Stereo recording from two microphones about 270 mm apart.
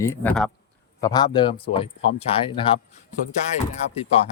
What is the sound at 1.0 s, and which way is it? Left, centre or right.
Speech, centre.